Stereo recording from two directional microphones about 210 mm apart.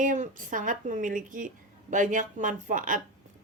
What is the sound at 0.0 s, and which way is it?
Speech, 40° right (ahead or behind).